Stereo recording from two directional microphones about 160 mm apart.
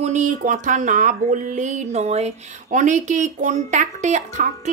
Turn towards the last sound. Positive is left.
turn(degrees=-45)  # may be behind; listen again after turning